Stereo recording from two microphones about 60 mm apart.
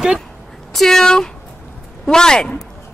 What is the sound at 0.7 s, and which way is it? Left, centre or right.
Speech, centre.